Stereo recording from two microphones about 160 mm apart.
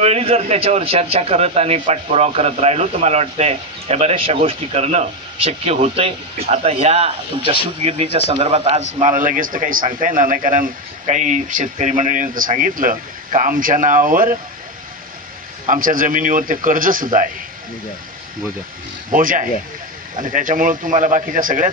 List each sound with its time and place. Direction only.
0.0 s a man's voice: 40° right (ahead or behind); by 14.3 s 60° right (ahead or behind)
15.6 s speech: 55° right (ahead or behind)
19.1 s speech: 60° right (ahead or behind)